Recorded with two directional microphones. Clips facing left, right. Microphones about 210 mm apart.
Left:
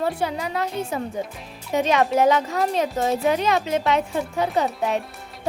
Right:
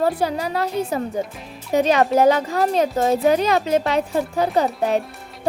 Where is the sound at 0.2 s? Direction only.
35° right (ahead or behind).